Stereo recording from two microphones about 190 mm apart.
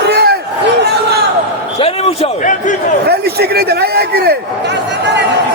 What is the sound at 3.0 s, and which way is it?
A man's voice, 55° right (ahead or behind).